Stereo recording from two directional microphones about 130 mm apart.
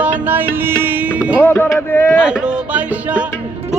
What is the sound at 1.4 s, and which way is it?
Speech, 15° left (ahead or behind).